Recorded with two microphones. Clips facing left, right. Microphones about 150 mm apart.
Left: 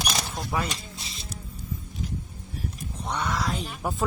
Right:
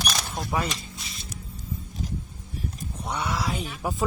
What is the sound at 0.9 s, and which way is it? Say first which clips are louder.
Music: even; 25° left (ahead or behind).